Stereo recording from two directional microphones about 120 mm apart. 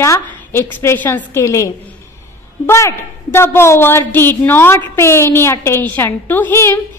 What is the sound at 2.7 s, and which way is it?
A woman's voice, 20° left (ahead or behind).